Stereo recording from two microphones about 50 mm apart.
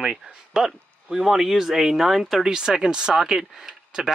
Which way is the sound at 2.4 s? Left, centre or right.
Centre.